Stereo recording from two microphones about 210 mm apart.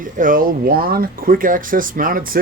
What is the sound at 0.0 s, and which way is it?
Speech, 40° right (ahead or behind).